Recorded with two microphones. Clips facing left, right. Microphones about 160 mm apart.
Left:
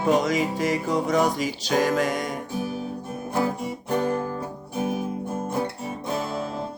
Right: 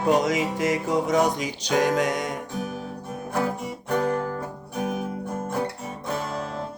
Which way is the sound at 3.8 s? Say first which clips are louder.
Even; 30° left (ahead or behind).